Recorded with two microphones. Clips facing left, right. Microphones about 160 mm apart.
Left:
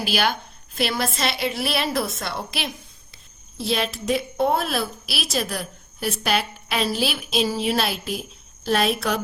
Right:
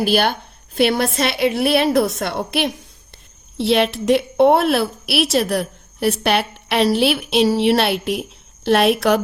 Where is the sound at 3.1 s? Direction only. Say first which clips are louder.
Right 10 dB; 70° right (ahead or behind).